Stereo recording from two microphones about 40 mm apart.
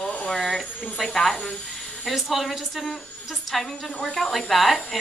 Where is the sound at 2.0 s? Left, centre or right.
Centre.